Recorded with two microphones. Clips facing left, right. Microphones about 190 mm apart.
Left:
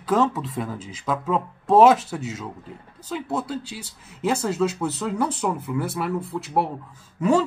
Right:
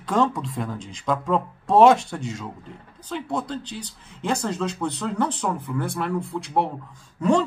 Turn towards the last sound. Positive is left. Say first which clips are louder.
# even
turn(degrees=5)  # may be behind; listen again after turning